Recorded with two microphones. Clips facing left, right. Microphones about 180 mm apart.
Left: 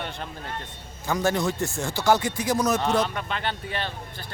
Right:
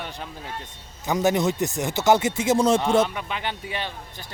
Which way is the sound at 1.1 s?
20° right (ahead or behind).